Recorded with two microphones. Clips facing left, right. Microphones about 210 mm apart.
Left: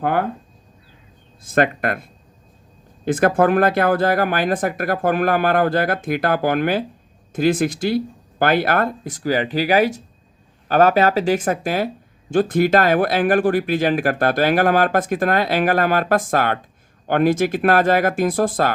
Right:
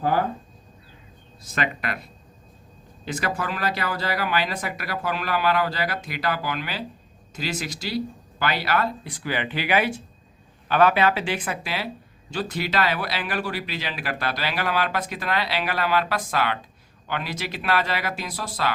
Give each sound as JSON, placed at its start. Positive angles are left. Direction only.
{"t": 0.0, "sound": "speech", "side_deg": 60}
{"t": 1.4, "sound": "speech", "side_deg": 50}